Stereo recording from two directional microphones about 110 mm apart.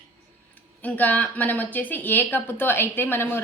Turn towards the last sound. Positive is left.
turn(degrees=20)  # may be behind; listen again after turning